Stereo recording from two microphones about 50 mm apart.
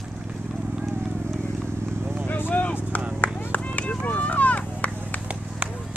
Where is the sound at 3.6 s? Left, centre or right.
Left.